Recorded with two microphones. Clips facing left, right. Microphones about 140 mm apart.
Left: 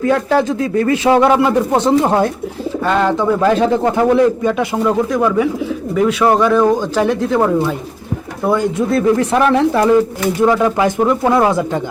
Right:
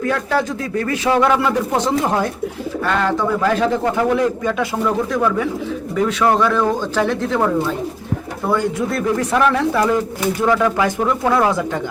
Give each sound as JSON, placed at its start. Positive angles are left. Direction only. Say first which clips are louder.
{"t": 0.0, "sound": "speech", "louder": "left 5 dB", "side_deg": 25}